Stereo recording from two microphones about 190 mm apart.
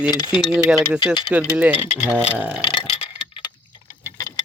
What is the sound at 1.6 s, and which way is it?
Speech, 10° right (ahead or behind).